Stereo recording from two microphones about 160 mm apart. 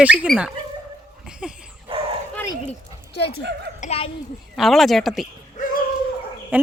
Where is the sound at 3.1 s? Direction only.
90° left.